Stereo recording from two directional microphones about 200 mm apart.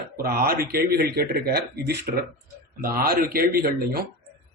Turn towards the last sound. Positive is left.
turn(degrees=-50)  # may be behind; listen again after turning